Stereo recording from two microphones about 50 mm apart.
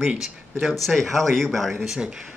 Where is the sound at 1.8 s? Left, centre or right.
Centre.